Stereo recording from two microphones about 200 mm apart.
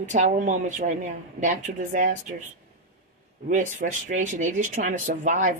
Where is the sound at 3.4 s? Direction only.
40° right (ahead or behind).